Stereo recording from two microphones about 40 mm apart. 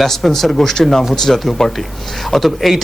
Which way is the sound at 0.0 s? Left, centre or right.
Centre.